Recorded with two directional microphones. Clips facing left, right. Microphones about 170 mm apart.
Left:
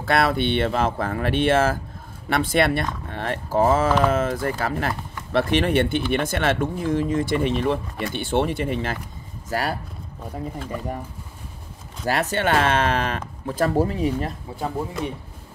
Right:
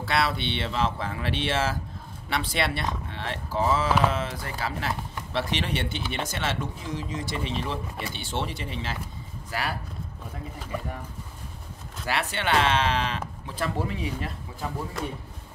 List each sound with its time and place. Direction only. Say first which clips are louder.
0.0 s speech: left 6 dB; 50° left (ahead or behind)
12.0 s speech: left 7 dB; 45° left (ahead or behind)